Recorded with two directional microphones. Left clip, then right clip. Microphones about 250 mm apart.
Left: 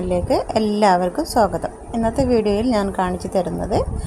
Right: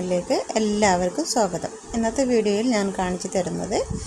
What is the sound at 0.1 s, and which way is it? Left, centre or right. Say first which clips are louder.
A woman's voice: left 4 dB; centre.